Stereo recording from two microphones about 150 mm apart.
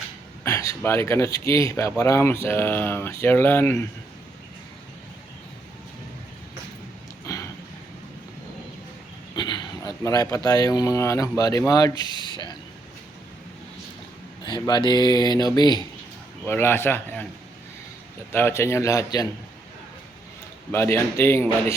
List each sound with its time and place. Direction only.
0.4 s a sound: 20° left (ahead or behind)
0.8 s speech: 15° left (ahead or behind)
7.3 s a sound: 20° left (ahead or behind)
9.3 s speech: 30° left (ahead or behind)
14.4 s speech: 30° left (ahead or behind)
16.5 s speech: 15° left (ahead or behind)
18.3 s speech: 15° left (ahead or behind)
20.7 s speech: 15° left (ahead or behind)